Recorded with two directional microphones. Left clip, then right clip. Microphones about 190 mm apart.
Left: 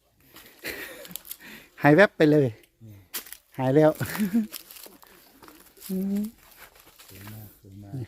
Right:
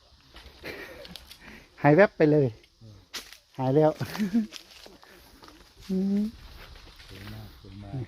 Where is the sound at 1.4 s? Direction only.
10° left (ahead or behind).